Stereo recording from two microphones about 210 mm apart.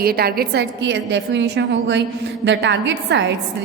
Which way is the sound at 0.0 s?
45° right (ahead or behind).